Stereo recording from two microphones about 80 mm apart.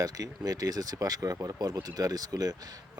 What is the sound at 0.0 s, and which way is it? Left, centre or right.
Speech, right.